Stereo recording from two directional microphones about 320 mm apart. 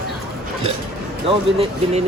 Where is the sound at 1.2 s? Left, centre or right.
Centre.